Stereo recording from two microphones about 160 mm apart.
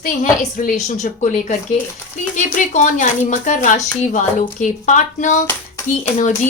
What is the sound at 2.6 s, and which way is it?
A woman's voice, 50° left (ahead or behind).